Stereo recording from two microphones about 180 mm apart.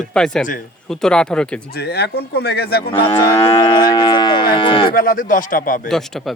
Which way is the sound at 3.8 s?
25° left (ahead or behind).